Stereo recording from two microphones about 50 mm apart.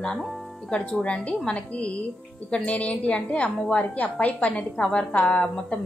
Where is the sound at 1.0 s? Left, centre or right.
Left.